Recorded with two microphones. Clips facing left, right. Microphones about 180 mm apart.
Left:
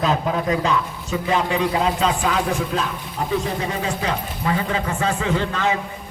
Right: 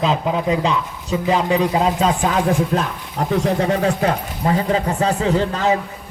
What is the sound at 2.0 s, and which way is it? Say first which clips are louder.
Speech: right 3 dB; 45° right (ahead or behind).